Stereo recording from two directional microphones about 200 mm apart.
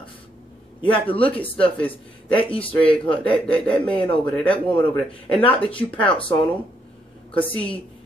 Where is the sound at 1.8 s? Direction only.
5° left (ahead or behind).